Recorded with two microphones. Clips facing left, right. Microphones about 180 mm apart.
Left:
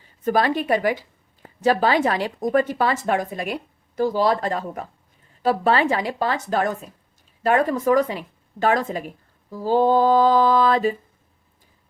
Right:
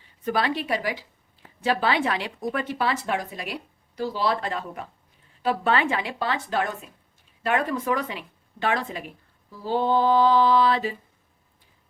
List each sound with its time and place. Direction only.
0.3 s a woman's voice: 45° left (ahead or behind)